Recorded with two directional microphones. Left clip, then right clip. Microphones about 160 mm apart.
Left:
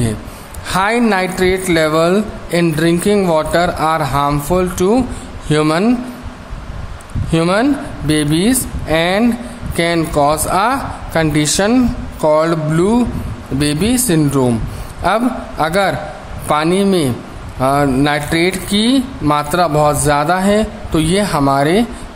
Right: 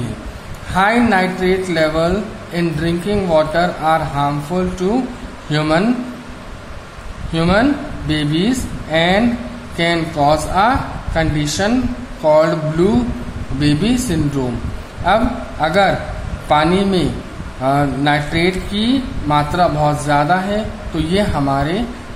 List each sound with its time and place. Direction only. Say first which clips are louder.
0.7 s speech: even; 40° left (ahead or behind)
7.3 s speech: left 1 dB; 45° left (ahead or behind)